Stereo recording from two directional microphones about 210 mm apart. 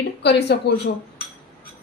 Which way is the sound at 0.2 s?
50° left (ahead or behind).